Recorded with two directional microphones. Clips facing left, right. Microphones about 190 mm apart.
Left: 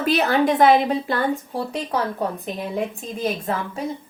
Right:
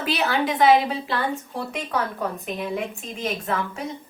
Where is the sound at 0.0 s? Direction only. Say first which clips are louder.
Left 5 dB; 45° left (ahead or behind).